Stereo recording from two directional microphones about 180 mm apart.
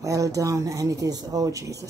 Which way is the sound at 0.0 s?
20° right (ahead or behind).